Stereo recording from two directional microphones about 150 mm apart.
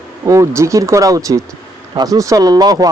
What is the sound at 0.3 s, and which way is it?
Speech, 20° right (ahead or behind).